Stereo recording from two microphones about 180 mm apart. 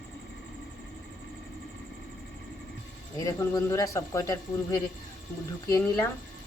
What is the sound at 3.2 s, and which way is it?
Speech, 20° left (ahead or behind).